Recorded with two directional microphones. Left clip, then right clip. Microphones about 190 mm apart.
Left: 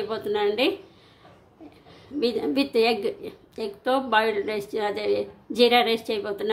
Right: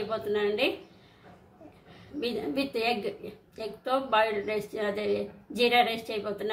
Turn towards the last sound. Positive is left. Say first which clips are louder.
# left 6 dB
turn(degrees=45)  # may be behind; listen again after turning